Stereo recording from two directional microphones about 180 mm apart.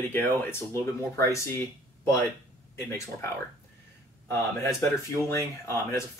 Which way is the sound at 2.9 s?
15° left (ahead or behind).